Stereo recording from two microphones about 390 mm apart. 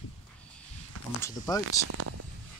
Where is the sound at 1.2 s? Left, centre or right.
Centre.